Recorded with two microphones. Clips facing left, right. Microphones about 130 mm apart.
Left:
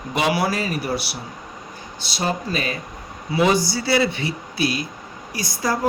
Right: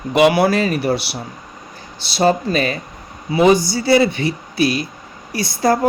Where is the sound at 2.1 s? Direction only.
30° right (ahead or behind).